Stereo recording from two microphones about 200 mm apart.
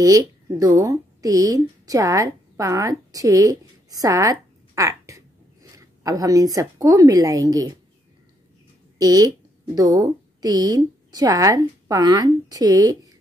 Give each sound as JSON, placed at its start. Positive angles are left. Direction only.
{"t": 0.0, "sound": "speech", "side_deg": -15}
{"t": 8.9, "sound": "speech", "side_deg": -20}